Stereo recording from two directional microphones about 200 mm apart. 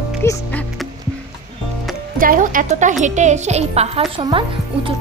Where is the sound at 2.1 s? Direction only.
45° right (ahead or behind).